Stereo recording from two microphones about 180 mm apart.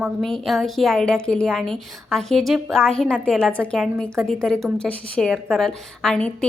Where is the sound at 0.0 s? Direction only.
Centre (ahead or behind).